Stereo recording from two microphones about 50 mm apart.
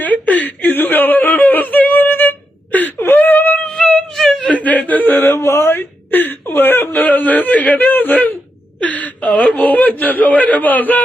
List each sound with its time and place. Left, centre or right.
0.0 s whimper: left
4.1 s whimper: centre
4.5 s whimper: left
5.2 s whimper: left